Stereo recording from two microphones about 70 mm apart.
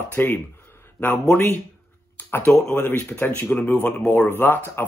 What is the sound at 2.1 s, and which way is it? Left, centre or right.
Speech, left.